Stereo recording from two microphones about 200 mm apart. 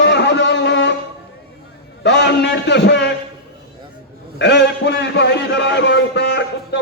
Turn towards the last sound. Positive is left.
turn(degrees=60)  # may be behind; listen again after turning